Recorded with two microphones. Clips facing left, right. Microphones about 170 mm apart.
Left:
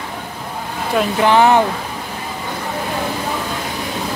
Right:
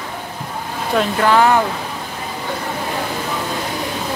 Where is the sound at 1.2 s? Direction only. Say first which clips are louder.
Left 2 dB; 20° left (ahead or behind).